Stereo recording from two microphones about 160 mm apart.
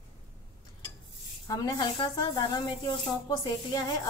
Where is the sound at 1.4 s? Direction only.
20° left (ahead or behind).